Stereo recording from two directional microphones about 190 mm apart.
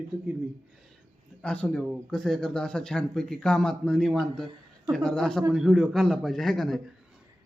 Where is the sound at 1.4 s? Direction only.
5° left (ahead or behind).